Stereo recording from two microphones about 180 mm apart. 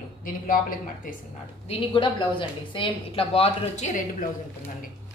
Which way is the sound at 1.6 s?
30° left (ahead or behind).